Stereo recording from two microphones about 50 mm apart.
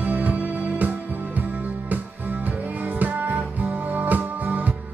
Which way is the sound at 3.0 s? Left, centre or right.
Right.